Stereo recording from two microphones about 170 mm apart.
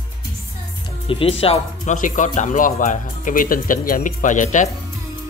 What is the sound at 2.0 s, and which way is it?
Speech, 50° left (ahead or behind).